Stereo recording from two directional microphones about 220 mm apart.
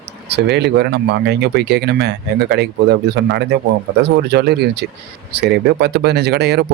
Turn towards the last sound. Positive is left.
turn(degrees=-50)  # may be behind; listen again after turning